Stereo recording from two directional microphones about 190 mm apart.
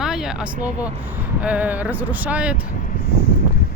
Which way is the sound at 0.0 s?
Centre (ahead or behind).